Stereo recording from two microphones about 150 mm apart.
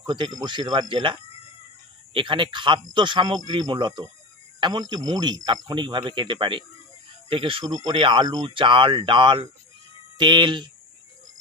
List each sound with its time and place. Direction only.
0.0 s speech: 30° right (ahead or behind)
2.1 s speech: 35° right (ahead or behind)